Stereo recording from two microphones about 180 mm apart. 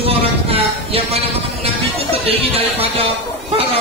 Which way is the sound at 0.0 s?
35° right (ahead or behind).